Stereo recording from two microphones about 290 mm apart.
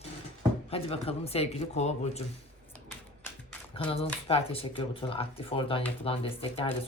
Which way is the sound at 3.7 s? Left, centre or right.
Centre.